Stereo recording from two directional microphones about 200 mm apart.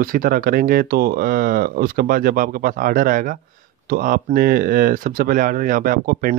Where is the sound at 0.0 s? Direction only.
45° right (ahead or behind).